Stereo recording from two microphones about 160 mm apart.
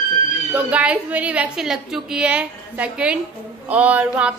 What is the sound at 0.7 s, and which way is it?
A woman's voice, 10° right (ahead or behind).